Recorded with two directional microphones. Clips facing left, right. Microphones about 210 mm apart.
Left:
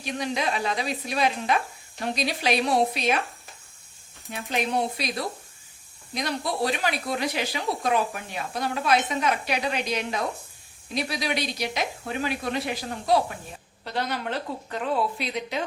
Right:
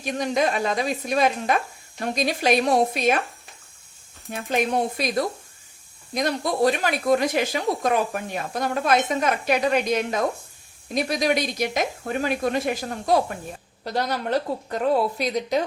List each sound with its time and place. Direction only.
0.0 s speech: 45° right (ahead or behind)
4.3 s a woman's voice: 50° right (ahead or behind)